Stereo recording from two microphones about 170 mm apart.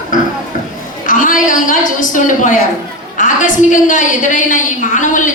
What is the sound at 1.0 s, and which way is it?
A woman's voice, 50° left (ahead or behind).